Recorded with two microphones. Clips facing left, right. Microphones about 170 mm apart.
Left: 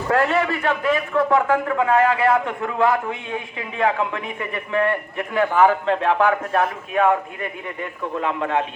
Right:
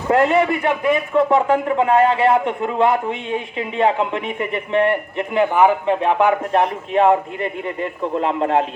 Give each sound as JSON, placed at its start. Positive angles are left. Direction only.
{"t": 0.1, "sound": "a man's voice", "side_deg": -20}